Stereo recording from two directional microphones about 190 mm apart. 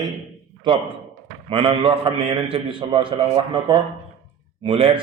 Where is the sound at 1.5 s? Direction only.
25° right (ahead or behind).